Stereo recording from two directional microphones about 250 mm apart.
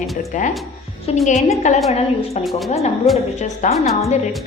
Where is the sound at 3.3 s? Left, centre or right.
Left.